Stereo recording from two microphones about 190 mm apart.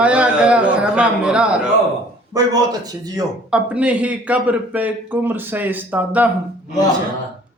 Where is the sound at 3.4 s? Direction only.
5° right (ahead or behind).